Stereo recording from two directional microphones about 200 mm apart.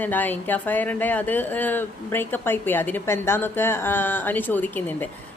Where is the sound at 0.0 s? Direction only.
10° left (ahead or behind).